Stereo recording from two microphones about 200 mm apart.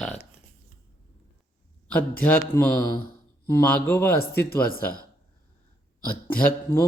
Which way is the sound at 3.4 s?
15° left (ahead or behind).